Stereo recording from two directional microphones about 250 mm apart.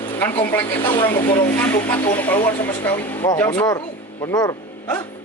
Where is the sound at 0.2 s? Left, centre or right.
Centre.